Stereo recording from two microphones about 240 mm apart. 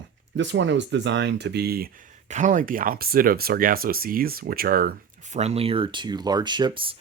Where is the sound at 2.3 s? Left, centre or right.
Right.